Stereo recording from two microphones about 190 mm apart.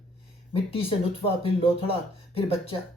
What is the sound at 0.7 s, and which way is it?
Speech, 30° left (ahead or behind).